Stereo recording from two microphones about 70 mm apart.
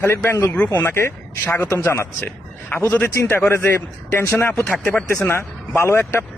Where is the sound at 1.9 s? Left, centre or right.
Left.